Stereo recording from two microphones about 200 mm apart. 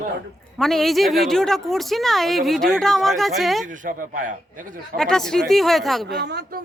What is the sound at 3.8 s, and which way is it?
Speech, 50° right (ahead or behind).